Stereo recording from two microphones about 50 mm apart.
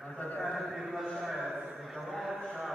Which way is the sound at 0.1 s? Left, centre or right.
Left.